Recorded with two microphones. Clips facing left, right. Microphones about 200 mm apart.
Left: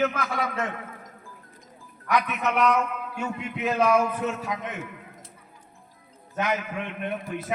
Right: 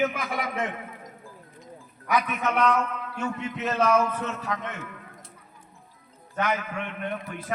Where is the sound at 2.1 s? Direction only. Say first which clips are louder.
Even; 5° right (ahead or behind); by 4.8 s 15° left (ahead or behind).